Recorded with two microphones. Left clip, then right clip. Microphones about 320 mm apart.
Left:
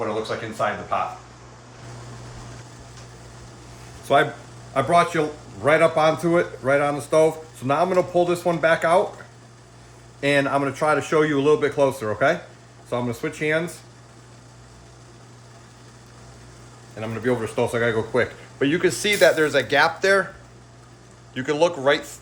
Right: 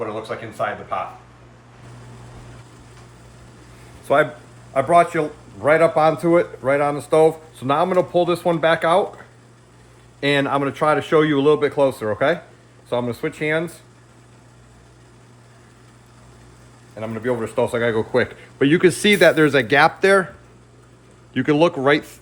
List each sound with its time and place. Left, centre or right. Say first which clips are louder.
0.0 s speech: left 1 dB; centre
4.1 s speech: right 1 dB; centre
10.2 s speech: right 1 dB; centre
17.0 s speech: right 1 dB; centre
21.3 s speech: right 4 dB; right